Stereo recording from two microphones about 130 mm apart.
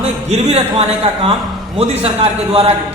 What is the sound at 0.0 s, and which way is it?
Speech, 50° right (ahead or behind).